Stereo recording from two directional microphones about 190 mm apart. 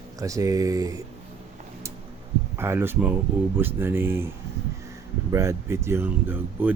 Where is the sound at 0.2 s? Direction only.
15° right (ahead or behind).